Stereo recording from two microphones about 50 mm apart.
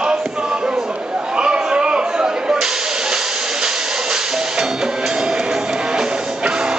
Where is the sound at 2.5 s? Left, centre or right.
Centre.